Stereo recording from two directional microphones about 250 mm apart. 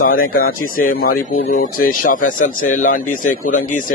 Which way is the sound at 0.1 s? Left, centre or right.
Left.